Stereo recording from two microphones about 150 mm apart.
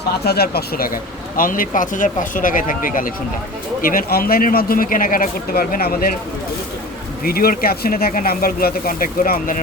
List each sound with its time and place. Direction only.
0.3 s speech: 90° left
1.4 s a man's voice: 65° left (ahead or behind)
7.3 s speech: 80° left